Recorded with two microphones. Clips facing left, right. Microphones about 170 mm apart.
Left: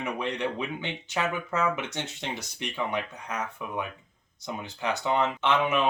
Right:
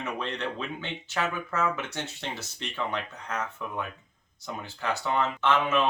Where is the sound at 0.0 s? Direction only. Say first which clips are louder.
Left 3 dB; 15° left (ahead or behind).